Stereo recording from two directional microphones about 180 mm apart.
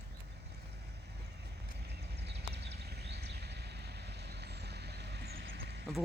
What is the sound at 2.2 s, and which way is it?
Vehicle, 65° right (ahead or behind).